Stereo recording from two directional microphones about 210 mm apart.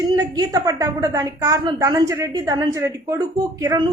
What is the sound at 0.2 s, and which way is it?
A woman's voice, 15° right (ahead or behind).